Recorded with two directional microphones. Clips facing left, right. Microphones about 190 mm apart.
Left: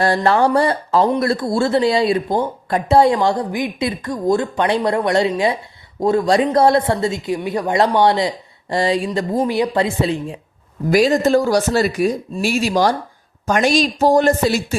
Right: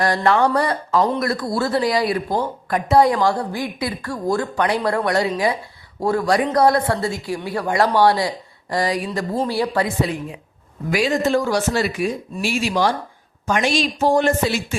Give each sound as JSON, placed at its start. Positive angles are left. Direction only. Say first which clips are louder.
{"t": 0.0, "sound": "speech", "louder": "left 2 dB", "side_deg": 30}
{"t": 10.8, "sound": "speech", "louder": "left 5 dB", "side_deg": 40}